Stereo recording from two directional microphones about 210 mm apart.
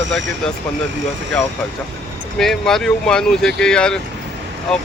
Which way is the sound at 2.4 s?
Centre (ahead or behind).